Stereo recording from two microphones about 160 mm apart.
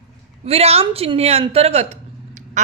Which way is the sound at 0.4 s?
40° right (ahead or behind).